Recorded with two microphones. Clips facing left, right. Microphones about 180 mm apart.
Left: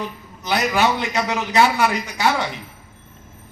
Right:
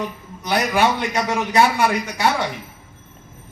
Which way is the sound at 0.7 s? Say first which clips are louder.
Right 1 dB; 10° right (ahead or behind).